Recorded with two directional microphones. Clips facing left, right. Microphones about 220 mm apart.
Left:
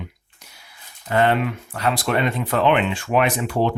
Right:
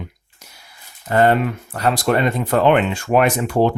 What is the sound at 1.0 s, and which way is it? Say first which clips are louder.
Speech: right 3 dB; 40° right (ahead or behind).